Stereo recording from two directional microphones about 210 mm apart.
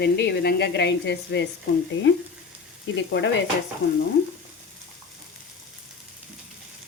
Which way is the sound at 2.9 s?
60° left (ahead or behind).